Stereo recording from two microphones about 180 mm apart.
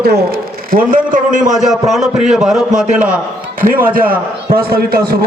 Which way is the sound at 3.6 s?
50° right (ahead or behind).